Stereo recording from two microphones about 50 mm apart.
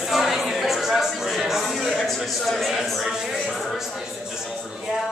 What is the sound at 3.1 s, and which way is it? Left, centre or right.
Music, centre.